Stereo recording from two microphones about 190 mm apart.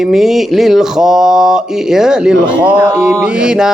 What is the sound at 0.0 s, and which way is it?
Speech, centre (ahead or behind).